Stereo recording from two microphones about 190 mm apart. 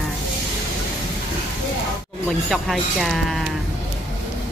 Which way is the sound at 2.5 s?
Centre (ahead or behind).